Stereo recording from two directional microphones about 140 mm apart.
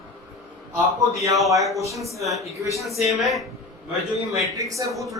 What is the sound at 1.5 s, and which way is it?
Speech, centre (ahead or behind).